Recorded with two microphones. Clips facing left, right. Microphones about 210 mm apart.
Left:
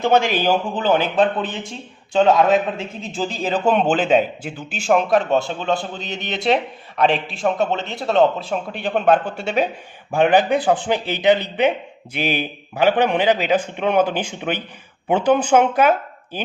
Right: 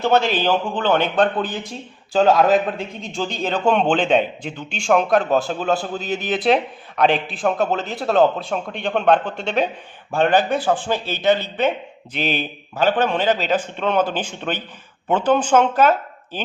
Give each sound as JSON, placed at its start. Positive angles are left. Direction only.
{"t": 0.0, "sound": "a man's voice", "side_deg": 15}